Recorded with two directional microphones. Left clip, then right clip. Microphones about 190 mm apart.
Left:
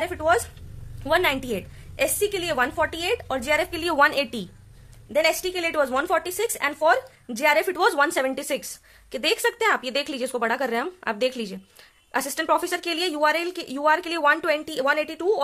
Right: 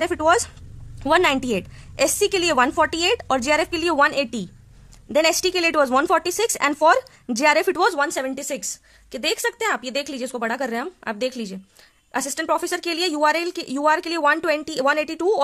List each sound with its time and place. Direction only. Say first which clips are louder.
0.0 s speech: right 4 dB; 30° right (ahead or behind)